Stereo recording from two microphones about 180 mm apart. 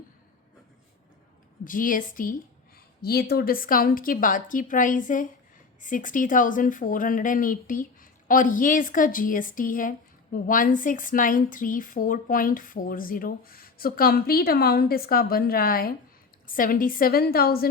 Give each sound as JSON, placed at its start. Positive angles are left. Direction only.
{"t": 1.6, "sound": "a woman's voice", "side_deg": 50}
{"t": 3.0, "sound": "a woman's voice", "side_deg": 60}